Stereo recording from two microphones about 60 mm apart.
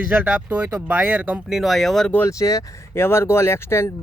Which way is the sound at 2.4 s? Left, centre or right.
Left.